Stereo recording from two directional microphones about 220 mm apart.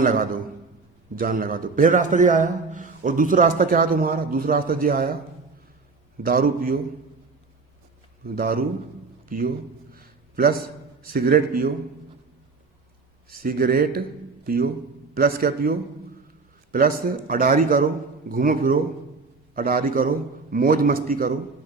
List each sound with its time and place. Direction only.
0.0 s a man's voice: 40° right (ahead or behind)
6.2 s a man's voice: 40° right (ahead or behind)
8.2 s a man's voice: 40° right (ahead or behind)
9.9 s a sound: 40° right (ahead or behind)
11.0 s a man's voice: 40° right (ahead or behind)
13.3 s a man's voice: 40° right (ahead or behind)